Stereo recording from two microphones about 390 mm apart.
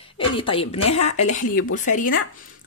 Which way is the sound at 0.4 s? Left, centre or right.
Centre.